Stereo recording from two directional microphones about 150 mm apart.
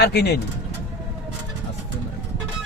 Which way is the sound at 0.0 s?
90° left.